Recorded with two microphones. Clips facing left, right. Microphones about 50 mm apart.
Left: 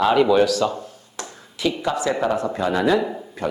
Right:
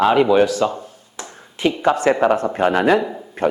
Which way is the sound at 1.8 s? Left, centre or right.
Right.